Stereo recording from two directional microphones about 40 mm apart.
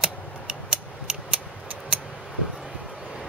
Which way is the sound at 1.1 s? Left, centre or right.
Right.